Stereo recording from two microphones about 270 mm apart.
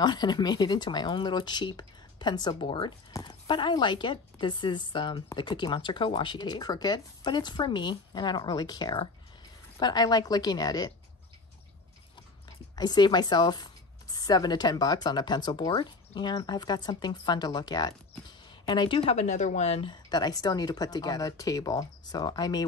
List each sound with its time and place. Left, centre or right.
0.0 s speech: centre
12.7 s speech: centre